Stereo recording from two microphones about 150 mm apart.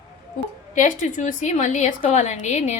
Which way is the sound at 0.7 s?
60° left (ahead or behind).